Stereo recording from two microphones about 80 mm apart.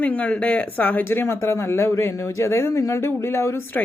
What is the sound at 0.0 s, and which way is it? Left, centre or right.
Speech, centre.